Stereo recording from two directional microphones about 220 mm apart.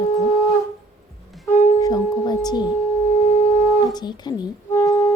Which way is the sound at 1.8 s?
15° left (ahead or behind).